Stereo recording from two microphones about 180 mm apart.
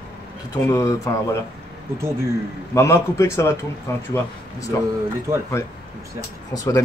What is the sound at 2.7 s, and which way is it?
A man's voice, 15° left (ahead or behind).